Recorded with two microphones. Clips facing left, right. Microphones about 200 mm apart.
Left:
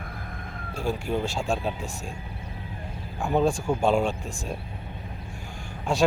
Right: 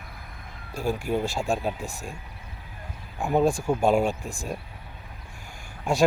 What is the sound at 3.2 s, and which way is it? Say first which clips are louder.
Speech: right 1 dB; 5° right (ahead or behind).